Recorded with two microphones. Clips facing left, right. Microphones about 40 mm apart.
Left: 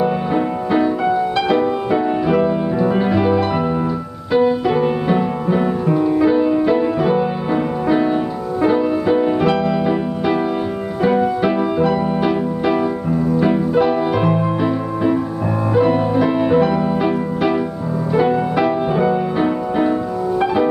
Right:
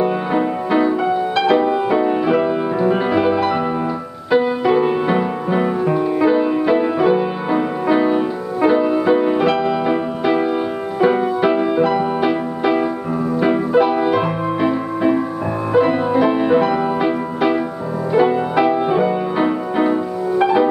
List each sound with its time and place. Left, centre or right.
0.0 s music: centre